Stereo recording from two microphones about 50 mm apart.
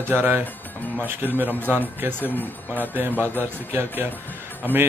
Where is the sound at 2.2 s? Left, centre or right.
Left.